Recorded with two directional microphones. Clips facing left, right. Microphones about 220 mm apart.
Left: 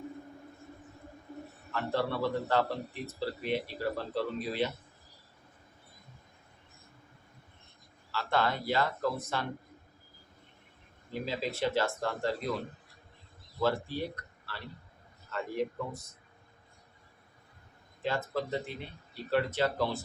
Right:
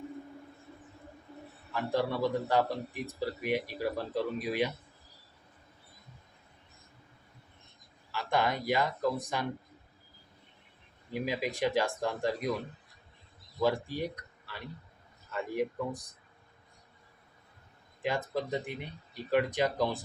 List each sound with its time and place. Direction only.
1.3 s a sound: 45° left (ahead or behind)
1.7 s a man's voice: 15° right (ahead or behind)
8.1 s a man's voice: 15° right (ahead or behind)
11.1 s a man's voice: 15° right (ahead or behind)
13.6 s a man's voice: 15° right (ahead or behind)
18.0 s a man's voice: 15° right (ahead or behind)